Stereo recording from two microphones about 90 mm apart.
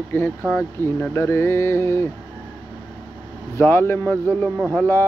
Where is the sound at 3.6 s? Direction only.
25° left (ahead or behind).